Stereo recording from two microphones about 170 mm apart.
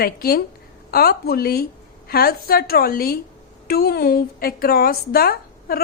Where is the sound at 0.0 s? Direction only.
65° left (ahead or behind).